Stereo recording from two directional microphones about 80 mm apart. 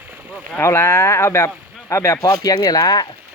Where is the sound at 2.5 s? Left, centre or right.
Left.